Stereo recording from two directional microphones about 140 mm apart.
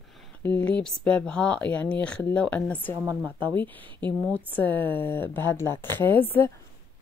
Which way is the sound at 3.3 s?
35° right (ahead or behind).